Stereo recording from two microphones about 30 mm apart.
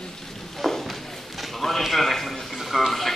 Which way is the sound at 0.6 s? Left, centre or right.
Centre.